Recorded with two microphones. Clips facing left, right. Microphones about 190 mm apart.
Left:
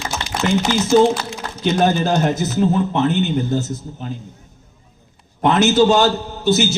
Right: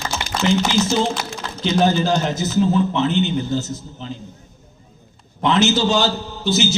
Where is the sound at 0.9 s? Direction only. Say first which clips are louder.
Left 7 dB; 50° left (ahead or behind).